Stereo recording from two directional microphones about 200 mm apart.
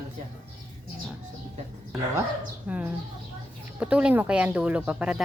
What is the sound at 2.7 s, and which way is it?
Speech, 5° right (ahead or behind).